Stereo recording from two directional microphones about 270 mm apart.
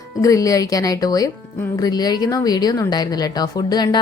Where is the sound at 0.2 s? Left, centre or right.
Centre.